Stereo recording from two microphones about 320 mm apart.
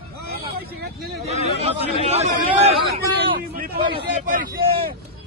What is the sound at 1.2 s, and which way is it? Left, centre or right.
A man's voice, centre.